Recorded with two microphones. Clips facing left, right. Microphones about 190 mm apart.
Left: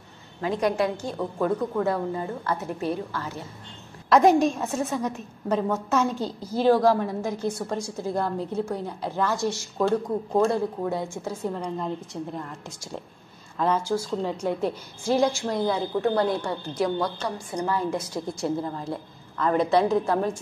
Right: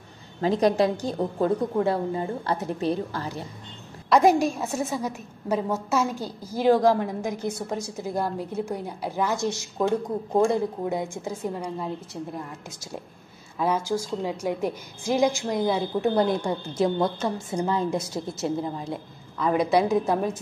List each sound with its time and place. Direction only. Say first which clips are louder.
0.4 s a woman's voice: right 3 dB; 35° right (ahead or behind)
4.1 s a woman's voice: left 1 dB; 5° right (ahead or behind)
13.6 s a woman's voice: left 1 dB; 10° right (ahead or behind)
18.6 s a woman's voice: even; 10° right (ahead or behind)